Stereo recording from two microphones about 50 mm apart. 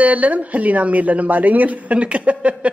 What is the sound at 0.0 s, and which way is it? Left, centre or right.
Speech, right.